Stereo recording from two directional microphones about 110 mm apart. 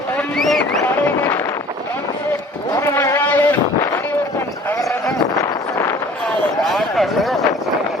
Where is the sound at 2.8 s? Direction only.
25° left (ahead or behind).